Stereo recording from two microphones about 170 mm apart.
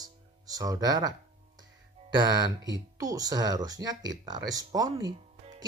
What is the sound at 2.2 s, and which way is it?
Speech, 25° right (ahead or behind).